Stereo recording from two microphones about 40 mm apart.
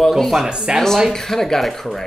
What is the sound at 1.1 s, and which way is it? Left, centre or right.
Speech, centre.